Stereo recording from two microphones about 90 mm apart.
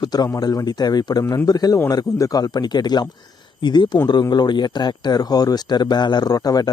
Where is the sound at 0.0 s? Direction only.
45° left (ahead or behind).